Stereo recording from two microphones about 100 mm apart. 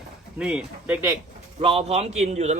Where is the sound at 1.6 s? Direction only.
80° right.